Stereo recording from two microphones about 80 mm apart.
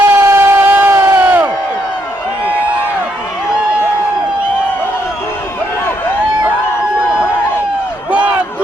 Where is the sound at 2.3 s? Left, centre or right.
Left.